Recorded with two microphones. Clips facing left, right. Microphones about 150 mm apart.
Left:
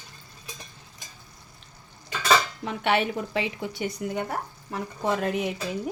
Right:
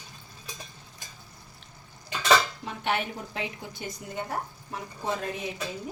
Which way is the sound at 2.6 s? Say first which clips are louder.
Left 5 dB; 75° left (ahead or behind).